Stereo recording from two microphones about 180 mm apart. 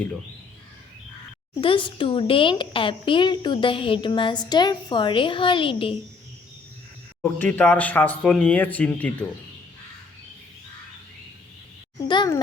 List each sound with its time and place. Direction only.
1.6 s a woman's voice: 30° left (ahead or behind)
7.2 s speech: 10° left (ahead or behind)
12.0 s a woman's voice: 25° left (ahead or behind)